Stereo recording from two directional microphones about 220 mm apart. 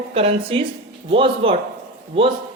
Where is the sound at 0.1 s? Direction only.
25° right (ahead or behind).